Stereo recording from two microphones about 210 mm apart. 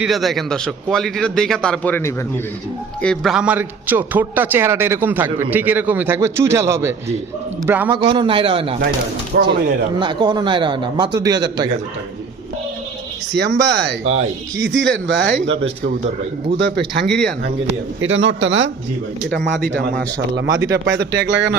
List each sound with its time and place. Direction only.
0.0 s a man's voice: centre (ahead or behind)
7.9 s speech: 25° right (ahead or behind)
9.3 s speech: 45° right (ahead or behind)
10.0 s speech: 20° right (ahead or behind)
13.3 s a man's voice: 55° right (ahead or behind)
15.9 s a man's voice: 30° right (ahead or behind)
16.6 s speech: 55° right (ahead or behind)
17.1 s a man's voice: centre (ahead or behind)
18.0 s a man's voice: 60° right (ahead or behind)